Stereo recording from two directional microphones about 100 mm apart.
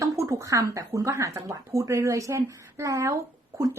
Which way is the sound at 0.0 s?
30° right (ahead or behind).